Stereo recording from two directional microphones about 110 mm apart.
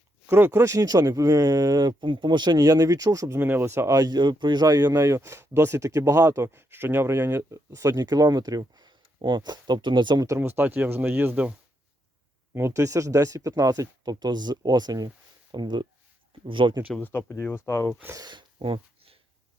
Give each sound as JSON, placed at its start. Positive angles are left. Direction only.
{"t": 0.3, "sound": "speech", "side_deg": -20}
{"t": 10.4, "sound": "speech", "side_deg": -20}
{"t": 12.5, "sound": "speech", "side_deg": -25}
{"t": 17.0, "sound": "speech", "side_deg": 20}
{"t": 18.2, "sound": "speech", "side_deg": -45}